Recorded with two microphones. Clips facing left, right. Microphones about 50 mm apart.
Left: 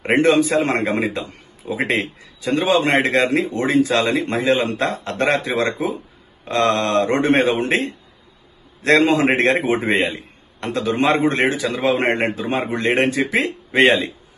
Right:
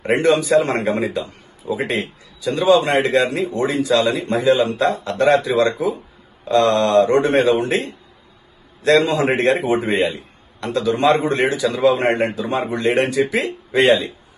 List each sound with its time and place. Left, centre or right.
0.0 s a man's voice: left